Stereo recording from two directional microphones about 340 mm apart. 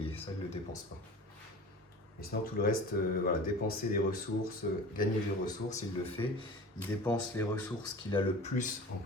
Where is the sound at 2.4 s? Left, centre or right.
Left.